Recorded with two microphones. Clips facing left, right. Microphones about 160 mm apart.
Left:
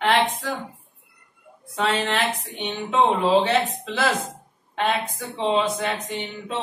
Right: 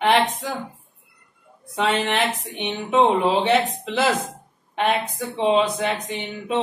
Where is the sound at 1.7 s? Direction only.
20° right (ahead or behind).